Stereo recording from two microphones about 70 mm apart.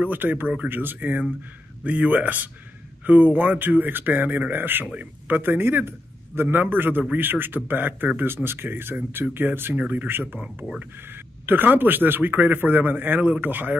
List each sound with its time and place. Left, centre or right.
0.0 s a man's voice: right
10.4 s speech: centre
10.8 s a man's voice: right